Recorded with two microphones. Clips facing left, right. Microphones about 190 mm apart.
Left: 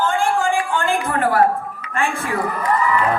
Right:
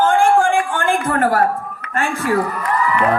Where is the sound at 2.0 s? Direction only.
40° right (ahead or behind).